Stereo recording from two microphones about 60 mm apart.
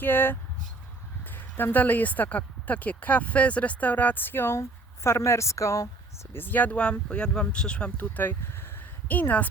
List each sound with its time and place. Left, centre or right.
0.0 s speech: left
5.0 s speech: left
6.3 s speech: left
7.9 s speech: left